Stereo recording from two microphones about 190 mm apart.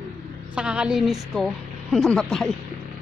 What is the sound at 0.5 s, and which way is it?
A woman's voice, 5° right (ahead or behind).